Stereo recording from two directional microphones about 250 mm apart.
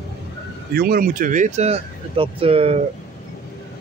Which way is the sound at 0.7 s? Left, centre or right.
Right.